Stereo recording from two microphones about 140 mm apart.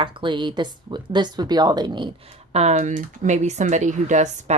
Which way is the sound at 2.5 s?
55° right (ahead or behind).